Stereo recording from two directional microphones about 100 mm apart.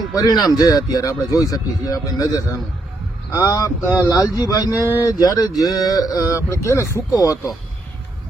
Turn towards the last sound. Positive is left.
turn(degrees=30)  # may be behind; listen again after turning